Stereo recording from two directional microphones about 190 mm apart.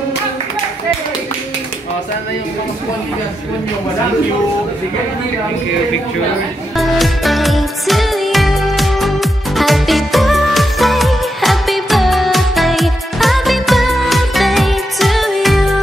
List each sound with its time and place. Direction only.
6.8 s music: centre (ahead or behind)